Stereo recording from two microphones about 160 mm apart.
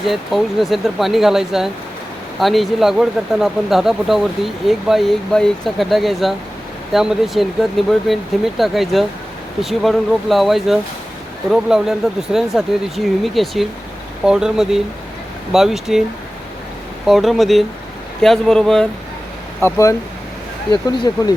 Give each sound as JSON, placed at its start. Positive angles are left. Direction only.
{"t": 0.0, "sound": "speech", "side_deg": 0}
{"t": 17.1, "sound": "speech", "side_deg": 0}
{"t": 19.6, "sound": "speech", "side_deg": 20}